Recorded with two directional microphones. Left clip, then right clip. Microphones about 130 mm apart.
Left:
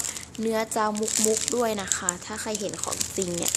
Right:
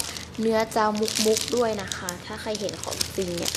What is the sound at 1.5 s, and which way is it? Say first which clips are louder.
Speech: right 1 dB; 35° left (ahead or behind).